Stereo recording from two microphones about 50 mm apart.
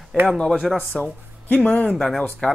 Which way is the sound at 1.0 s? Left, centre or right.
Left.